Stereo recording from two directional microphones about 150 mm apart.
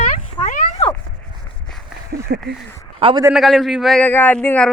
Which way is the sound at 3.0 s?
40° right (ahead or behind).